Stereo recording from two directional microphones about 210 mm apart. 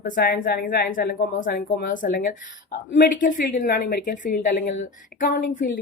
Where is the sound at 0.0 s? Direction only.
40° left (ahead or behind).